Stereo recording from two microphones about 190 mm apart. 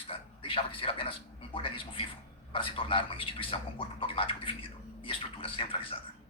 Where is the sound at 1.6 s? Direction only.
30° left (ahead or behind).